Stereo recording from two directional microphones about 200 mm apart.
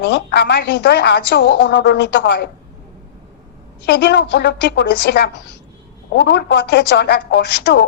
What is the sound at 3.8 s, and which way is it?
A woman's voice, 60° left (ahead or behind).